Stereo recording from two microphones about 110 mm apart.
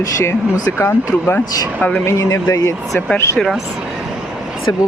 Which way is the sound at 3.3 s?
Centre (ahead or behind).